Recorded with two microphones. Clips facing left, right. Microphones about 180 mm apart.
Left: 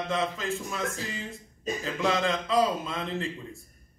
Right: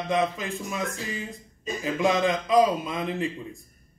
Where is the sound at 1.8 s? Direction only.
15° right (ahead or behind).